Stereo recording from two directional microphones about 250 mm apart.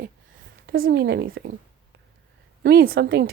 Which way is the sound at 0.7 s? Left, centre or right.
Right.